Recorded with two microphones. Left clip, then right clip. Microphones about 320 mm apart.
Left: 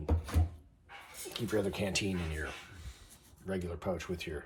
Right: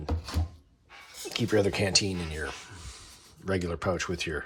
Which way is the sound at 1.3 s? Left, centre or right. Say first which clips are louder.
Right 8 dB; right.